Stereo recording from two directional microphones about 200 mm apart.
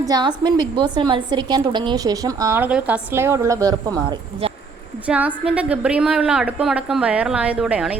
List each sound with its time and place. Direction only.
0.0 s a woman's voice: 20° right (ahead or behind)
5.0 s a woman's voice: 5° right (ahead or behind)